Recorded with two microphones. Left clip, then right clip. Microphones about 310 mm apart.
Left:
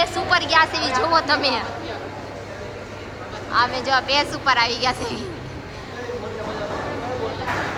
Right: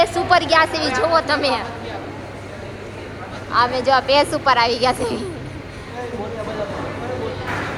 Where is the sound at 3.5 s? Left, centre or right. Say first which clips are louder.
Right 3 dB; centre.